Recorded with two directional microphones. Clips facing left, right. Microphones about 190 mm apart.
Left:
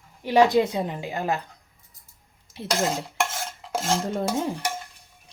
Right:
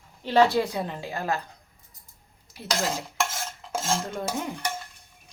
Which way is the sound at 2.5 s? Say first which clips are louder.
Left 3 dB; 20° left (ahead or behind).